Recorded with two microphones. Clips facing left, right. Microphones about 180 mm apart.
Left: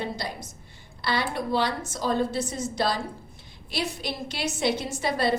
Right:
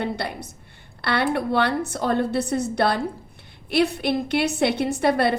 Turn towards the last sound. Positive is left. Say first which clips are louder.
# right 6 dB
turn(degrees=-60)  # may be behind; listen again after turning